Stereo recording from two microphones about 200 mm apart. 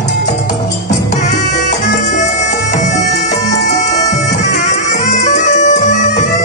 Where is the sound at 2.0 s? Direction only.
35° left (ahead or behind).